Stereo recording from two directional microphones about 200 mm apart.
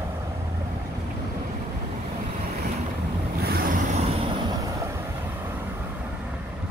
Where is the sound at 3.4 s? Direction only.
50° right (ahead or behind).